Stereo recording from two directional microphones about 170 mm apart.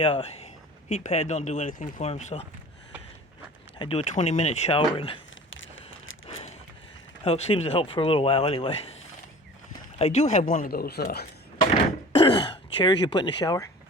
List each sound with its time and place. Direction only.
0.0 s speech: 35° left (ahead or behind)
3.8 s speech: 35° left (ahead or behind)
7.3 s speech: 35° left (ahead or behind)
10.0 s speech: 40° left (ahead or behind); by 11.3 s 65° left (ahead or behind)
12.1 s throat clearing: 30° left (ahead or behind)